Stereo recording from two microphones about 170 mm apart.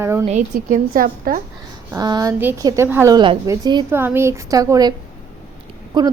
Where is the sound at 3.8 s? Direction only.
15° right (ahead or behind).